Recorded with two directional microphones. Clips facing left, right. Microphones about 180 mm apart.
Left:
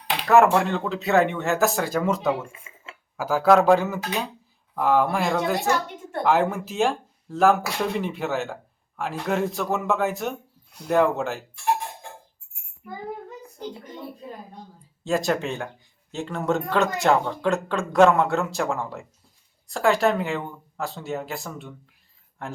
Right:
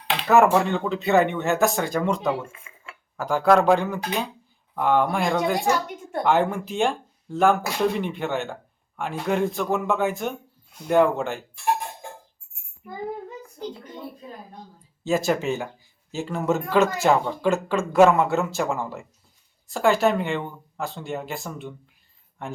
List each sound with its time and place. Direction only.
0.3 s speech: centre (ahead or behind)
2.5 s dishes: 25° left (ahead or behind)
3.2 s speech: 5° left (ahead or behind)
5.5 s a woman's voice: 10° right (ahead or behind)
6.2 s speech: centre (ahead or behind)
15.0 s speech: centre (ahead or behind)